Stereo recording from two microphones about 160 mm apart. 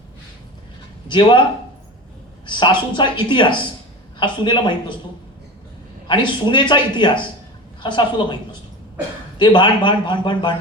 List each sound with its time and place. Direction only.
1.0 s speech: 30° left (ahead or behind)
2.5 s speech: 30° left (ahead or behind)
6.1 s speech: 30° left (ahead or behind)
9.4 s speech: 30° left (ahead or behind)